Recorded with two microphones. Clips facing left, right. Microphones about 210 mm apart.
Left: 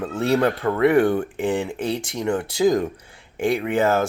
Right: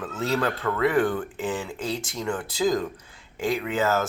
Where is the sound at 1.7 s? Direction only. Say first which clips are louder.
Left 5 dB; 60° left (ahead or behind).